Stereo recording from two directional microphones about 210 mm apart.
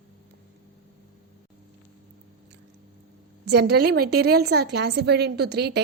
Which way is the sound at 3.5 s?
50° right (ahead or behind).